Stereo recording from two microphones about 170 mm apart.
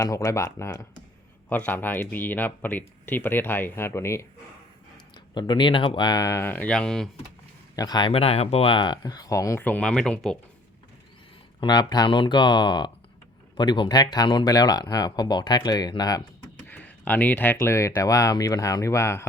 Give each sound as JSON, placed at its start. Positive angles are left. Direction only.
{"t": 0.0, "sound": "speech", "side_deg": 20}
{"t": 5.1, "sound": "speech", "side_deg": 25}
{"t": 7.8, "sound": "speech", "side_deg": 25}
{"t": 11.6, "sound": "speech", "side_deg": 25}
{"t": 16.6, "sound": "speech", "side_deg": 10}